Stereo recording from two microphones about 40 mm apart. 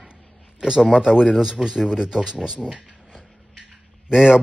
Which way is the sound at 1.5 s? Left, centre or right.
Centre.